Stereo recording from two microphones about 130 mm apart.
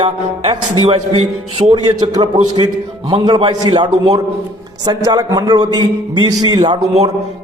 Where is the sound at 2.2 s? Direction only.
45° right (ahead or behind).